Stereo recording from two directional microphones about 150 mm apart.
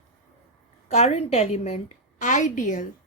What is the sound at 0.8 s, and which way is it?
Speech, 45° left (ahead or behind).